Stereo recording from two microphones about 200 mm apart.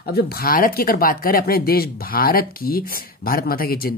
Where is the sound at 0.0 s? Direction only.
50° left (ahead or behind).